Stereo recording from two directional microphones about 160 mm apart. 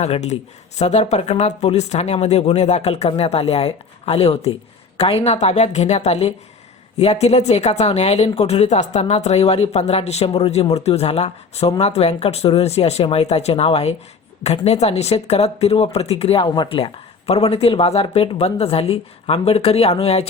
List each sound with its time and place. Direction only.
0.0 s a woman's voice: 45° left (ahead or behind)